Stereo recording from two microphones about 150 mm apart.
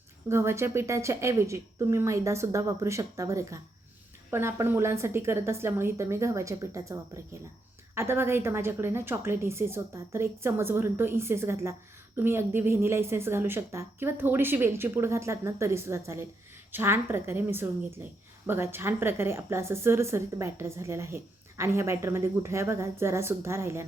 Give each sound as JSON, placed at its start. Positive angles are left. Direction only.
{"t": 0.3, "sound": "a woman's voice", "side_deg": -15}
{"t": 7.9, "sound": "a woman's voice", "side_deg": -15}